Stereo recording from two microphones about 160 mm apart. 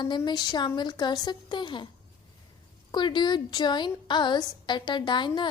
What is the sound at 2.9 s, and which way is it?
A woman's voice, 30° left (ahead or behind).